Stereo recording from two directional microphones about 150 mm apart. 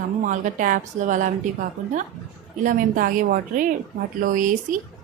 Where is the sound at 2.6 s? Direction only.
65° right (ahead or behind).